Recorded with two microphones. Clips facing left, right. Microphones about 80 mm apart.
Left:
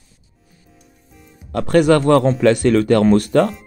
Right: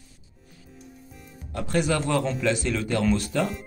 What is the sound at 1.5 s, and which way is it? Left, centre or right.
Speech, left.